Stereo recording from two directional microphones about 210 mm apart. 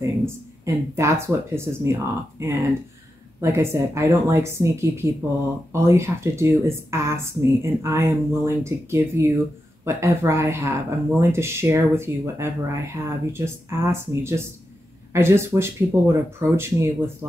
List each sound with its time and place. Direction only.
0.0 s speech: 15° right (ahead or behind)